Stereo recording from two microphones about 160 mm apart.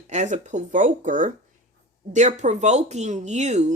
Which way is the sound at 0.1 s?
50° right (ahead or behind).